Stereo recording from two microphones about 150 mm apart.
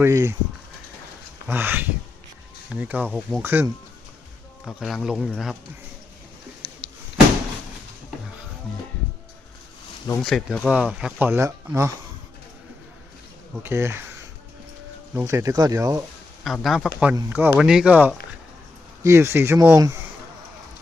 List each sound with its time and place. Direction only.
0.0 s speech: 20° right (ahead or behind)
1.5 s speech: 15° right (ahead or behind)
3.4 s speech: 15° right (ahead or behind)
4.6 s speech: centre (ahead or behind)
10.2 s speech: centre (ahead or behind); by 11.9 s 20° right (ahead or behind)
13.6 s speech: 15° right (ahead or behind)
15.1 s speech: 20° right (ahead or behind)
16.4 s speech: centre (ahead or behind)
17.6 s speech: 5° right (ahead or behind); by 20.0 s 20° right (ahead or behind)